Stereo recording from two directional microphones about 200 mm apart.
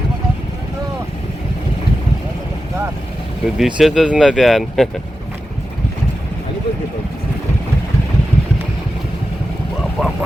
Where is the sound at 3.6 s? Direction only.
5° right (ahead or behind).